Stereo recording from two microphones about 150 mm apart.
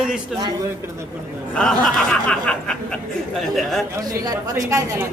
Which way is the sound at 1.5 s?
5° left (ahead or behind).